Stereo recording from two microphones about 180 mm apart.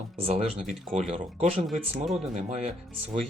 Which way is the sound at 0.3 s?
35° right (ahead or behind).